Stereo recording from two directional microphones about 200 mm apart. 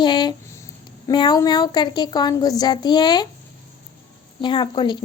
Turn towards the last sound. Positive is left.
turn(degrees=20)  # may be behind; listen again after turning